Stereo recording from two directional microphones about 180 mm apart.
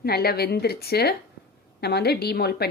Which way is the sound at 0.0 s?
60° left (ahead or behind).